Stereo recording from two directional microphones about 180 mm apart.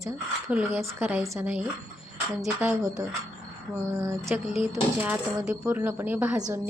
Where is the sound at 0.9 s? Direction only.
10° right (ahead or behind).